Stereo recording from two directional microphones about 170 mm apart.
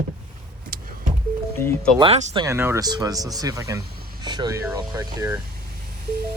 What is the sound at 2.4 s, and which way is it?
Speech, 15° right (ahead or behind).